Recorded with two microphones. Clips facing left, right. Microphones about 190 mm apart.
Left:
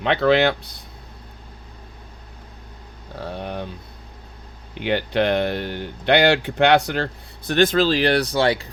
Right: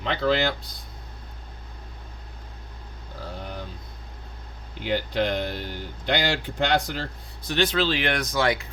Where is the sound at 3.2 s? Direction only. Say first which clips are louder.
Left 7 dB; 65° left (ahead or behind).